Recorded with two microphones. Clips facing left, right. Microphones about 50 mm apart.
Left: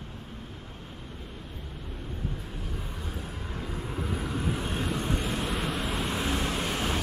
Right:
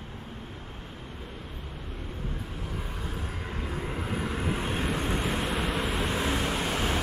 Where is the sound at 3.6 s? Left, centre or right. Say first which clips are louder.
Right 1 dB; right.